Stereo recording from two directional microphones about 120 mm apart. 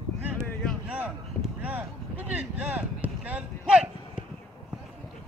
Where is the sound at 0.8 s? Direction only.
15° right (ahead or behind).